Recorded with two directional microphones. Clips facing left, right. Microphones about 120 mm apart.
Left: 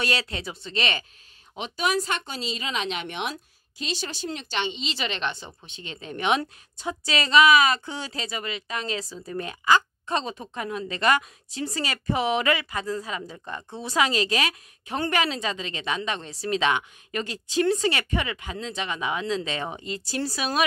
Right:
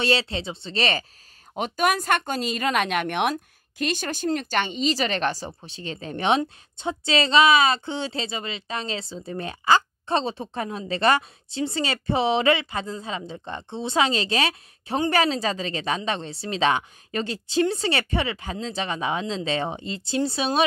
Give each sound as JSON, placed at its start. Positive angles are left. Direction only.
{"t": 0.0, "sound": "speech", "side_deg": -30}
{"t": 1.5, "sound": "speech", "side_deg": -50}